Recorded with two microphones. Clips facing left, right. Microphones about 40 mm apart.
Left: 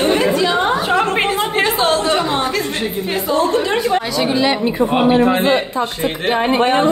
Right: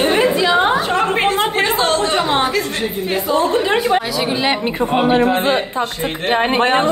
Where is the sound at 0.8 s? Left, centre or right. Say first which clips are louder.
Left 1 dB; centre.